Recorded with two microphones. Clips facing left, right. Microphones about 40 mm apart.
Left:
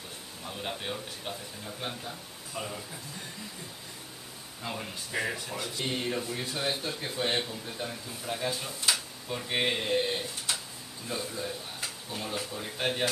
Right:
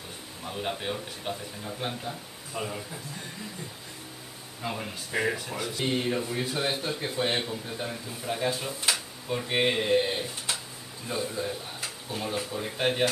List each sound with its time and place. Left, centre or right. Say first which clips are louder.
0.4 s speech: right 4 dB; centre
4.6 s speech: right 3 dB; centre